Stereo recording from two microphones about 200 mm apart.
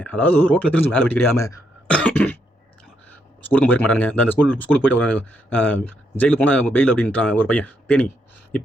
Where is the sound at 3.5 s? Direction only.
10° left (ahead or behind).